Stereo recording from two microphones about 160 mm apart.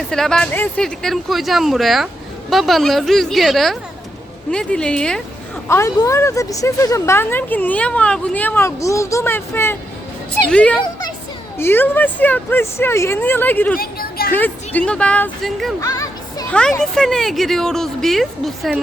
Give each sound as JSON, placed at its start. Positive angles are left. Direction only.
{"t": 0.1, "sound": "speech", "side_deg": 5}
{"t": 5.6, "sound": "a woman's voice", "side_deg": 15}
{"t": 13.7, "sound": "speech", "side_deg": 70}
{"t": 14.3, "sound": "a woman's voice", "side_deg": 10}
{"t": 15.8, "sound": "music", "side_deg": 20}
{"t": 16.5, "sound": "speech", "side_deg": 5}